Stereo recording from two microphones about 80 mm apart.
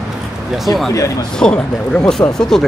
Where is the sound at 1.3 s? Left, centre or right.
Centre.